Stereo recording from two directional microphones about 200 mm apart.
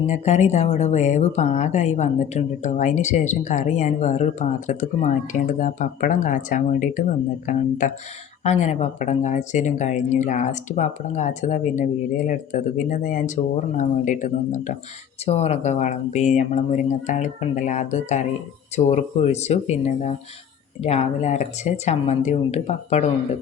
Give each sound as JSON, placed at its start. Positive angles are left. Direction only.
{"t": 0.1, "sound": "speech", "side_deg": 35}